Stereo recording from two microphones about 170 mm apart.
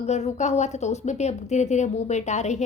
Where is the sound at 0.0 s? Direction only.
40° left (ahead or behind).